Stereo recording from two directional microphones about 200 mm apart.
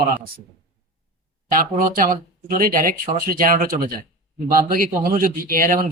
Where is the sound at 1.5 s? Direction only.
45° right (ahead or behind).